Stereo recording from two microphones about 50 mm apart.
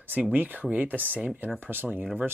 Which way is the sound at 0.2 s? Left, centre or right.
Right.